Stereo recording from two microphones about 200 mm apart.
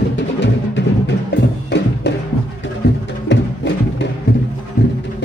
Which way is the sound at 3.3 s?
60° left (ahead or behind).